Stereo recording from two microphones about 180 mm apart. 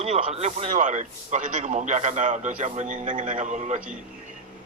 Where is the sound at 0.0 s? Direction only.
35° right (ahead or behind).